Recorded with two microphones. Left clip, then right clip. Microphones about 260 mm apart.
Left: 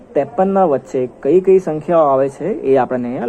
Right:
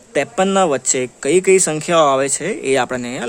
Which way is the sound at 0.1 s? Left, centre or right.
Right.